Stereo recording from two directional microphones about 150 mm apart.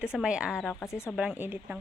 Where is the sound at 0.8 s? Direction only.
15° left (ahead or behind).